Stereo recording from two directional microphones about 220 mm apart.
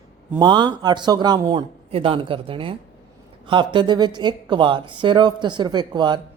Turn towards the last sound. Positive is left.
turn(degrees=-20)  # may be behind; listen again after turning